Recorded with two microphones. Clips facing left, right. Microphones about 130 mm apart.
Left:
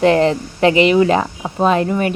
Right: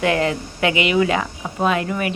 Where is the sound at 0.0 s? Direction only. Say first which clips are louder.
Left 6 dB; 30° left (ahead or behind).